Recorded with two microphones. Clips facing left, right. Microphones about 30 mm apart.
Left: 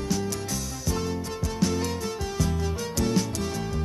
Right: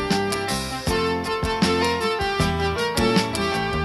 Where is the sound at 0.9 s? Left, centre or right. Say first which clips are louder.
Right 7 dB; right.